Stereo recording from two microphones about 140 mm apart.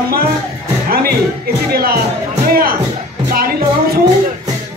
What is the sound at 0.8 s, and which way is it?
Music, 90° right.